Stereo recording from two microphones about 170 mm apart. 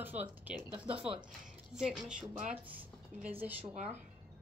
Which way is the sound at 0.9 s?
30° right (ahead or behind).